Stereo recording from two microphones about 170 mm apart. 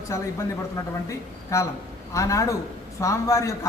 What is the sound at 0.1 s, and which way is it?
Speech, 15° left (ahead or behind).